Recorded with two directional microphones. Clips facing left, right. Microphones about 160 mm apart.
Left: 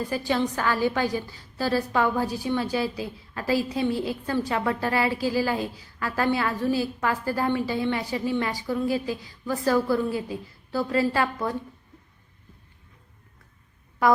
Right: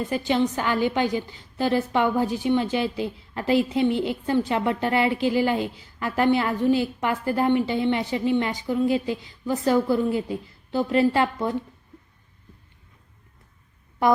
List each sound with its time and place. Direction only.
0.0 s a woman's voice: 20° right (ahead or behind)